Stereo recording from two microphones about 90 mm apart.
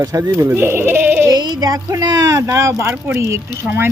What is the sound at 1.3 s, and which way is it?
Music, 45° right (ahead or behind).